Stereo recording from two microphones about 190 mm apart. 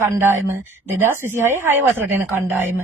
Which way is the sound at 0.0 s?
10° right (ahead or behind).